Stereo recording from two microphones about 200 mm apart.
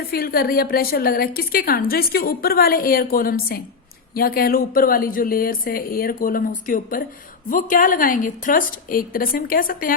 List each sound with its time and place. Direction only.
0.1 s a woman's voice: 50° left (ahead or behind)